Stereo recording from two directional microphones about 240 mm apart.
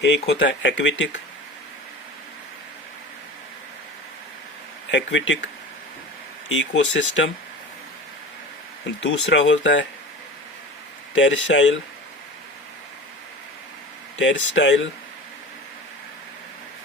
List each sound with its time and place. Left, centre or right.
0.0 s speech: left
4.9 s speech: left
6.5 s speech: left
9.0 s speech: left
11.2 s speech: left
14.2 s speech: left